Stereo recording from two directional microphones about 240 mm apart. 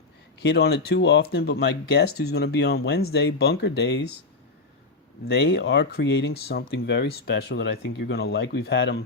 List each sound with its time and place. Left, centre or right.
0.4 s speech: left
5.3 s speech: left